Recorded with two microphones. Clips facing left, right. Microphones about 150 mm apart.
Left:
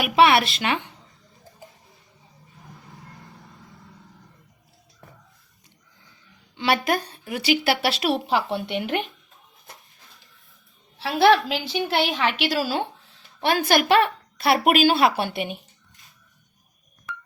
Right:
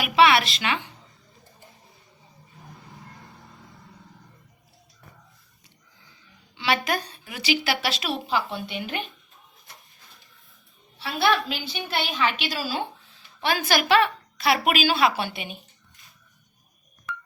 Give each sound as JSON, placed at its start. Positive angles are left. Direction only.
{"t": 0.0, "sound": "a woman's voice", "side_deg": 50}
{"t": 6.6, "sound": "a woman's voice", "side_deg": 50}
{"t": 11.0, "sound": "a woman's voice", "side_deg": 90}
{"t": 13.7, "sound": "a woman's voice", "side_deg": 55}